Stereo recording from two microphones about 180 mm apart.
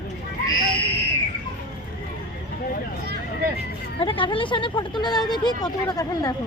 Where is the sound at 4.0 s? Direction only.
30° left (ahead or behind).